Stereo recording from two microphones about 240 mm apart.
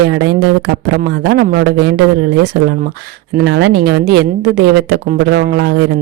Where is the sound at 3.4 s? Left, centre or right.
Right.